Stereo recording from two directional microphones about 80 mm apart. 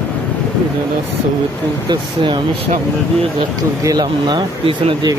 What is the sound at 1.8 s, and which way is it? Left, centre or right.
Speech, right.